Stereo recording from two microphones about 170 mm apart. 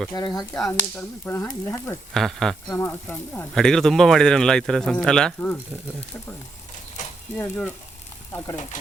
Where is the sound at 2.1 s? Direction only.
5° left (ahead or behind).